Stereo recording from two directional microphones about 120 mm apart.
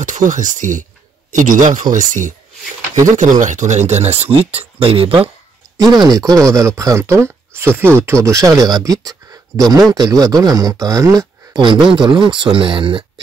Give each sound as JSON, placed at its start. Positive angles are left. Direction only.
{"t": 0.0, "sound": "speech", "side_deg": -90}
{"t": 6.0, "sound": "speech", "side_deg": -30}
{"t": 11.6, "sound": "speech", "side_deg": -40}